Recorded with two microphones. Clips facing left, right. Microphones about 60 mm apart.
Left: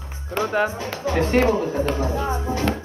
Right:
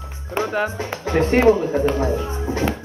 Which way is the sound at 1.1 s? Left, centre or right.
Right.